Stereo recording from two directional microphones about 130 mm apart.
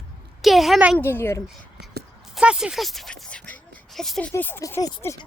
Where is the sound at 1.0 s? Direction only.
15° left (ahead or behind).